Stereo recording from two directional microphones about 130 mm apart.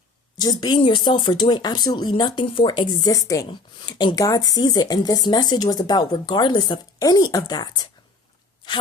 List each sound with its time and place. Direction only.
0.3 s speech: 30° left (ahead or behind)